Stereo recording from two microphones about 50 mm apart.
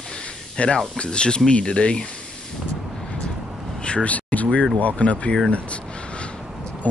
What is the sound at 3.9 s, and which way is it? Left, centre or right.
Speech, left.